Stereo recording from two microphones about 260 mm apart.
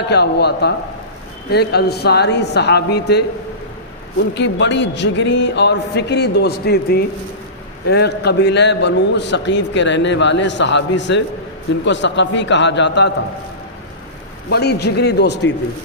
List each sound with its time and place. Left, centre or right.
0.1 s a man's voice: left
14.5 s a man's voice: left